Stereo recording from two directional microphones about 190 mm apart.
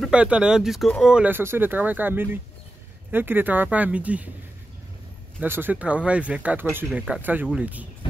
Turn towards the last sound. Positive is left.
turn(degrees=-5)  # may be behind; listen again after turning